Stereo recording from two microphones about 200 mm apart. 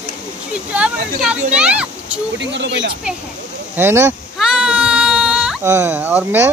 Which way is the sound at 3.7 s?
10° right (ahead or behind).